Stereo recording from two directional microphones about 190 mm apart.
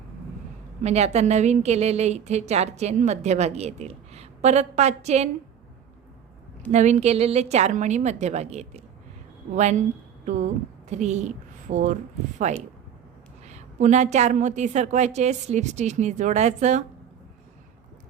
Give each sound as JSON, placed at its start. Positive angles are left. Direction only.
{"t": 0.8, "sound": "a woman's voice", "side_deg": -35}
{"t": 6.7, "sound": "a woman's voice", "side_deg": -35}